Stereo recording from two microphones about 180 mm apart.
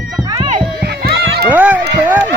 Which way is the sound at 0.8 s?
60° right (ahead or behind).